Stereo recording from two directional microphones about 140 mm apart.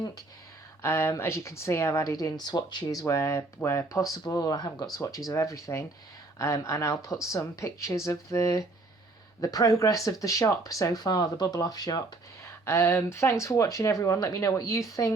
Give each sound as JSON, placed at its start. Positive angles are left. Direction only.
{"t": 0.8, "sound": "speech", "side_deg": 20}